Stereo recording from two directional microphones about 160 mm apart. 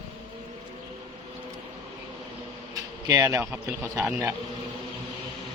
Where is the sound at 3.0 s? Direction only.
20° right (ahead or behind).